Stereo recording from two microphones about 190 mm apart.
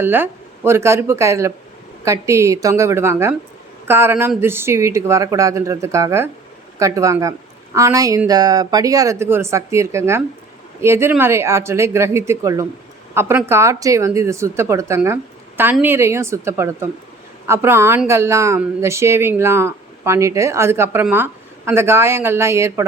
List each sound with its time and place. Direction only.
0.0 s speech: 10° right (ahead or behind)